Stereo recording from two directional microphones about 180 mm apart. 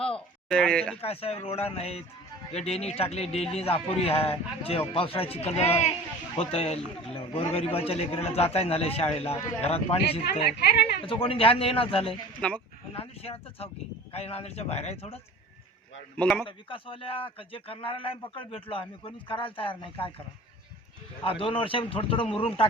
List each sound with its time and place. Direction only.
0.4 s speech: 5° left (ahead or behind)
1.0 s a man's voice: 35° left (ahead or behind)
10.4 s a woman's voice: 65° left (ahead or behind)
11.0 s a man's voice: 30° left (ahead or behind)
12.4 s speech: 5° left (ahead or behind)
12.9 s a man's voice: 30° left (ahead or behind)
16.1 s speech: 5° left (ahead or behind)
16.5 s a man's voice: 30° left (ahead or behind)
21.2 s a man's voice: 30° left (ahead or behind)